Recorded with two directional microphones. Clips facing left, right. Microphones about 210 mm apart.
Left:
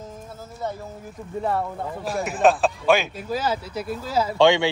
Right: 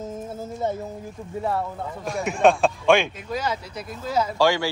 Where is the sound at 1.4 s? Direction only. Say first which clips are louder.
Left 1 dB; centre (ahead or behind).